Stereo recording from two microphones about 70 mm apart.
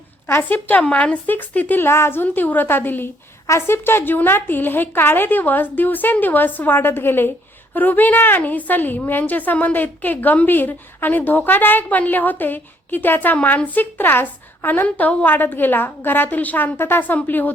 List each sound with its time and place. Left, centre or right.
0.3 s a woman's voice: left
3.4 s a woman's voice: left